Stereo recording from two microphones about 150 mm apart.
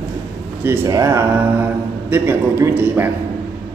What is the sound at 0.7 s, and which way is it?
A man's voice, 20° right (ahead or behind).